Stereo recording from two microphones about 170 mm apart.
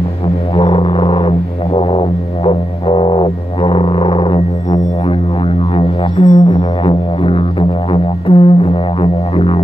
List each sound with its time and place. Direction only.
0.6 s music: 30° left (ahead or behind)
5.8 s music: 35° left (ahead or behind)